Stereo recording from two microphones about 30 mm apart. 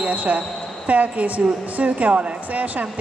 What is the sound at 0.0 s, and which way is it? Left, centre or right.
A woman's voice, right.